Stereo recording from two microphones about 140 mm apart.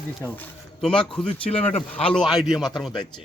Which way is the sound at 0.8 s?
5° left (ahead or behind).